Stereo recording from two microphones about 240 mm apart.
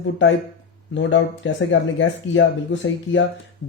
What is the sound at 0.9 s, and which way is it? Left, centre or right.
Speech, left.